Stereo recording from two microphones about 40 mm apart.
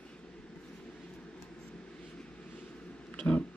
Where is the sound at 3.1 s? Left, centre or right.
Left.